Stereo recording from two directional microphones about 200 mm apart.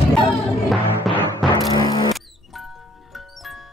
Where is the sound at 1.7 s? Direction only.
15° left (ahead or behind).